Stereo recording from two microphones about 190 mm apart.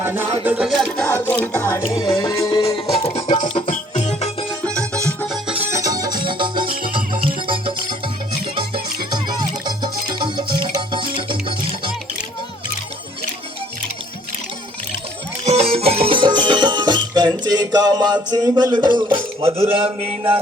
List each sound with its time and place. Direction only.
0.0 s music: 10° right (ahead or behind)
0.4 s a sound: 5° right (ahead or behind); by 1.8 s 10° left (ahead or behind)
1.9 s music: 20° left (ahead or behind); by 4.4 s 35° left (ahead or behind)
4.7 s music: 15° right (ahead or behind)
15.4 s music: 35° right (ahead or behind)